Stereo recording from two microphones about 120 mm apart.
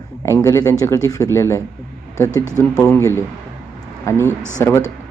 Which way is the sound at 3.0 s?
25° left (ahead or behind).